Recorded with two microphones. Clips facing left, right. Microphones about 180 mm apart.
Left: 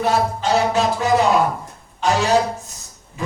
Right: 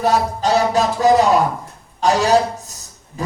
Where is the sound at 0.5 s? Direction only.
35° right (ahead or behind).